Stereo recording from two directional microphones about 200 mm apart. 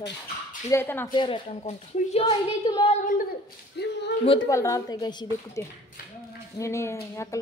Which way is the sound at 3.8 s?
55° left (ahead or behind).